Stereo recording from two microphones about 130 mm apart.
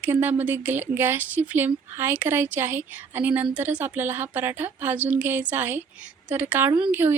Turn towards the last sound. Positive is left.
turn(degrees=-15)  # may be behind; listen again after turning